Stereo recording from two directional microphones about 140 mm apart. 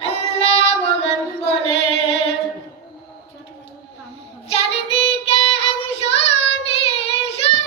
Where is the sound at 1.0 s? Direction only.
45° left (ahead or behind).